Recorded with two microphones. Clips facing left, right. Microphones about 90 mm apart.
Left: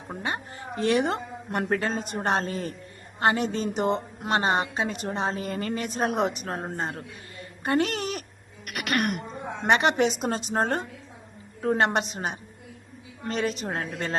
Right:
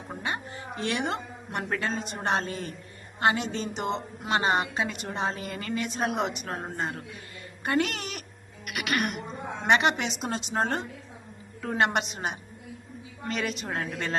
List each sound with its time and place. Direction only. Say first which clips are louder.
0.2 s a woman's voice: left 1 dB; 40° left (ahead or behind)
8.6 s throat clearing: left 2 dB; 45° left (ahead or behind)
9.6 s a woman's voice: left 2 dB; 40° left (ahead or behind)